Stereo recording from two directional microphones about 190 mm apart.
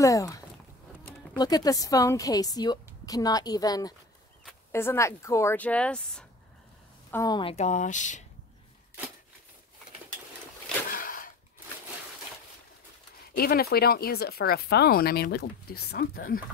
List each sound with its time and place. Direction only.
0.0 s a woman's voice: 15° left (ahead or behind)
1.4 s a woman's voice: 20° left (ahead or behind); by 6.2 s 5° left (ahead or behind)
7.1 s a woman's voice: 15° left (ahead or behind)
7.5 s speech: 40° left (ahead or behind)
11.0 s a sound: 45° left (ahead or behind)
13.4 s speech: 55° left (ahead or behind)